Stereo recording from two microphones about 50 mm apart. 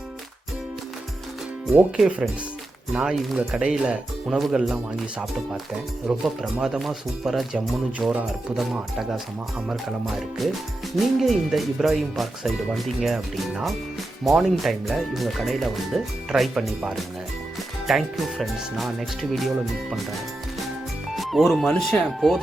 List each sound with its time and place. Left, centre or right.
2.9 s speech: centre
4.3 s speech: centre
6.1 s speech: centre
9.8 s speech: centre
17.8 s speech: centre
21.2 s speech: centre